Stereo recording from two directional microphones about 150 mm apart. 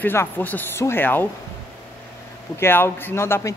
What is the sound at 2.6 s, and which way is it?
Speech, 15° left (ahead or behind).